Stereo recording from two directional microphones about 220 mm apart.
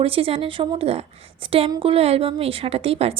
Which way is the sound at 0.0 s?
25° right (ahead or behind).